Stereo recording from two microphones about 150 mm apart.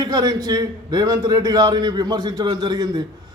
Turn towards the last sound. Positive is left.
turn(degrees=-30)  # may be behind; listen again after turning